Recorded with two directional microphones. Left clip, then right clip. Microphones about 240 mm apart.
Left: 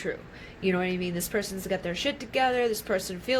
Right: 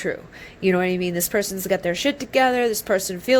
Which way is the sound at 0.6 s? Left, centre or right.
Right.